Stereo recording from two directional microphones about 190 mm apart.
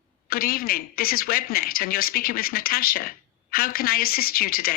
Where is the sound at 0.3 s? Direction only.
50° left (ahead or behind).